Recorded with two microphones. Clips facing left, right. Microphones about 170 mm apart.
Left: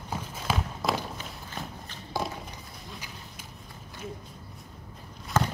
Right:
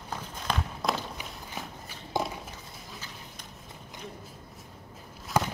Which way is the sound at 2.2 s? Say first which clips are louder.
Right 1 dB; 20° right (ahead or behind).